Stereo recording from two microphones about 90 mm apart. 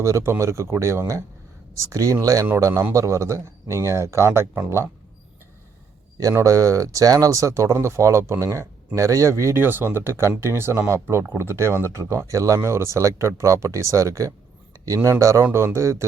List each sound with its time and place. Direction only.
0.0 s speech: 30° right (ahead or behind)
6.3 s speech: 35° right (ahead or behind)